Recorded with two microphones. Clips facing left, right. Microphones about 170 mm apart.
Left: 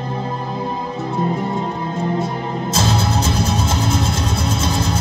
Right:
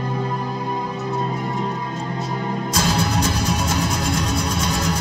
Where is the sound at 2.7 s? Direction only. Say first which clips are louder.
Left 2 dB; 25° left (ahead or behind).